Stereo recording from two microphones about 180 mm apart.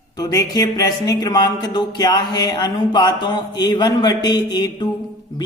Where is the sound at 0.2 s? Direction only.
20° left (ahead or behind).